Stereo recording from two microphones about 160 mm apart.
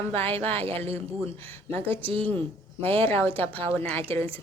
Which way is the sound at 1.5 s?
15° left (ahead or behind).